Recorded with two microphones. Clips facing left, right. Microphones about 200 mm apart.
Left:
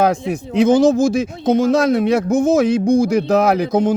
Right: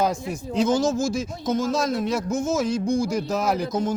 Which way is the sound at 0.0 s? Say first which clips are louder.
Left 7 dB; 65° left (ahead or behind).